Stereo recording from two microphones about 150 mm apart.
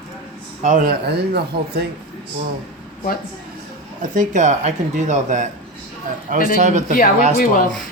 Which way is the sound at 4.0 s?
55° right (ahead or behind).